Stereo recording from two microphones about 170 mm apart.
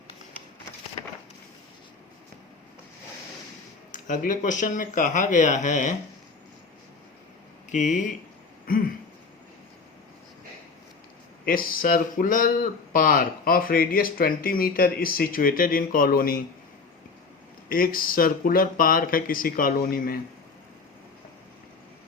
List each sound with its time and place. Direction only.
3.9 s speech: 50° left (ahead or behind)
7.7 s speech: 45° left (ahead or behind)
11.4 s speech: 55° left (ahead or behind)
17.7 s speech: 55° left (ahead or behind)